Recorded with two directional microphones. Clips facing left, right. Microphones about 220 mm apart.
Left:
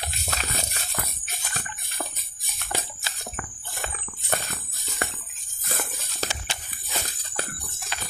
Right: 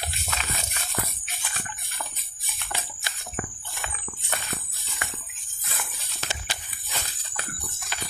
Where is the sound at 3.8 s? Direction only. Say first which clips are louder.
Left 2 dB; 40° left (ahead or behind).